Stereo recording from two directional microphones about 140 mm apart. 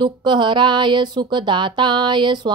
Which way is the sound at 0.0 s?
35° right (ahead or behind).